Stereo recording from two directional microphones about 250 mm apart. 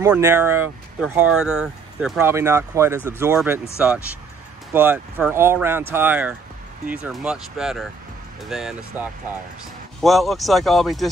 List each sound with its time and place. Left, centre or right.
0.0 s speech: centre
4.7 s speech: centre